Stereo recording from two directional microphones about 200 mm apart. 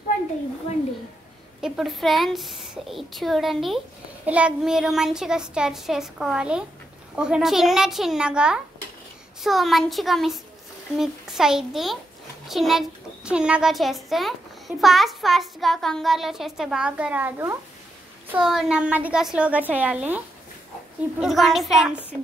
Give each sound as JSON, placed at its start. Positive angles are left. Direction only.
{"t": 1.6, "sound": "a child's voice", "side_deg": 0}
{"t": 21.2, "sound": "a child's voice", "side_deg": 0}